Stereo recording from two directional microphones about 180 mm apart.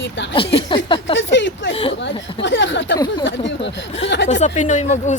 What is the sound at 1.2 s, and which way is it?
Speech, 90° left.